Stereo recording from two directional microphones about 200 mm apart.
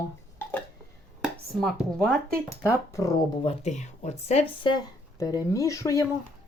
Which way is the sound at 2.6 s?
15° left (ahead or behind).